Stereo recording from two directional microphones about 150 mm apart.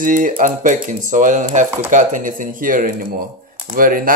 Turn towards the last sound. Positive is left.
turn(degrees=-70)  # may be behind; listen again after turning